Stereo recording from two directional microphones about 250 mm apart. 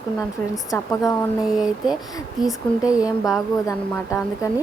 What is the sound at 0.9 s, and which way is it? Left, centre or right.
Speech, centre.